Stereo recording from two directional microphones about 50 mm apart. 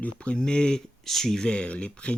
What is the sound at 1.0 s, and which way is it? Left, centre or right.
Speech, centre.